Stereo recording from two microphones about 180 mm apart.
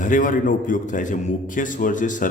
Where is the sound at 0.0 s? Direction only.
45° left (ahead or behind).